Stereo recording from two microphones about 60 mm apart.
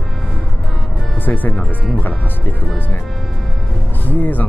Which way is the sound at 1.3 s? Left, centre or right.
Left.